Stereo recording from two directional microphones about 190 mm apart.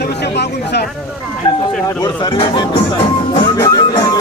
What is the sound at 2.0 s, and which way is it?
Speech, 25° left (ahead or behind).